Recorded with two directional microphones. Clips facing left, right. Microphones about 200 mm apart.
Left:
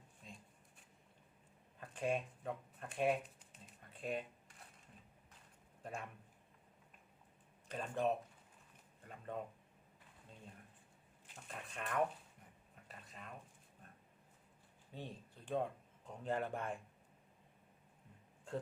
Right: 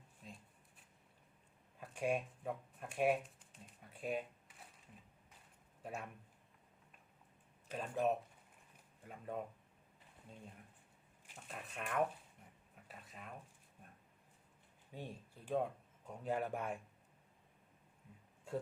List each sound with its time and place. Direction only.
1.8 s speech: 10° right (ahead or behind)
3.9 s a sound: 10° right (ahead or behind)
5.8 s a man's voice: 5° right (ahead or behind)
7.7 s speech: 5° right (ahead or behind)
11.3 s speech: 5° right (ahead or behind)
12.7 s a sound: 5° right (ahead or behind)
14.9 s speech: 10° right (ahead or behind)